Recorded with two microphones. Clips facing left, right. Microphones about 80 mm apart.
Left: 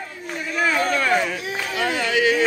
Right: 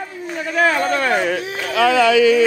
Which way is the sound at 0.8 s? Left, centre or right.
Right.